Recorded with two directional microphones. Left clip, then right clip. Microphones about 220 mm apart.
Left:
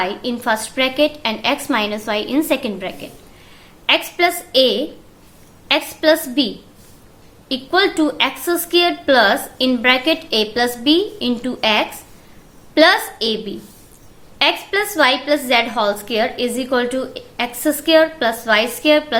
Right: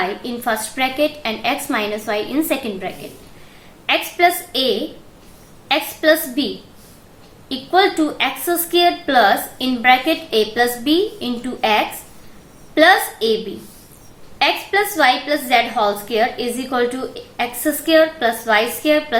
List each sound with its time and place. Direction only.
0.3 s a woman's voice: 50° left (ahead or behind)
7.4 s a woman's voice: 45° left (ahead or behind)
14.3 s a woman's voice: 45° left (ahead or behind)